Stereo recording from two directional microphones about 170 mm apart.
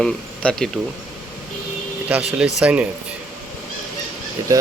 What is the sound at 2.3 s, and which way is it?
Speech, 5° right (ahead or behind).